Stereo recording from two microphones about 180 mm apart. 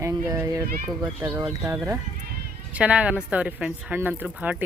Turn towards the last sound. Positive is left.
turn(degrees=-10)  # may be behind; listen again after turning